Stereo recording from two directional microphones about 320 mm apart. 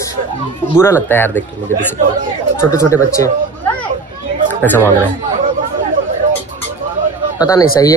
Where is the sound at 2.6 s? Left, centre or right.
Centre.